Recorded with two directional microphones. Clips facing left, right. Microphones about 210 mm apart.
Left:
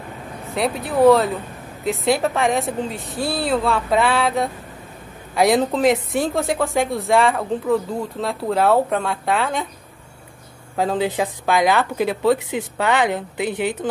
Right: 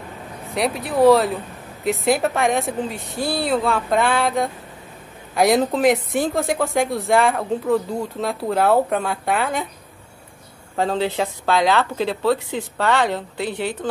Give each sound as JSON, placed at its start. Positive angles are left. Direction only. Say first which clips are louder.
{"t": 0.6, "sound": "a woman's voice", "louder": "even", "side_deg": 0}
{"t": 10.8, "sound": "speech", "louder": "left 1 dB", "side_deg": 10}